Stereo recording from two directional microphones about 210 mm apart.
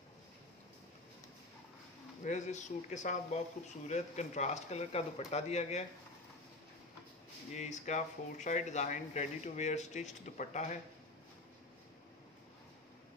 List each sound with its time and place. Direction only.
2.2 s speech: 35° left (ahead or behind)
7.5 s speech: 35° left (ahead or behind)